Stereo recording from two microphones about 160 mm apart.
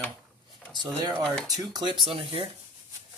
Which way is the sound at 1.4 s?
25° right (ahead or behind).